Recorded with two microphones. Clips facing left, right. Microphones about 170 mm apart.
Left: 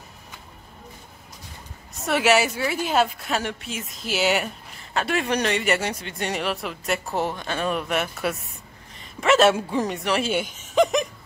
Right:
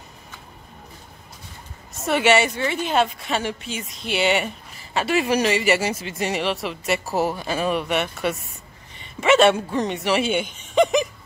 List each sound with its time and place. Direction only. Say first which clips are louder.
2.0 s a woman's voice: right 2 dB; centre (ahead or behind)
8.9 s a sound: right 2 dB; centre (ahead or behind)
9.7 s a woman's voice: right 2 dB; 5° left (ahead or behind)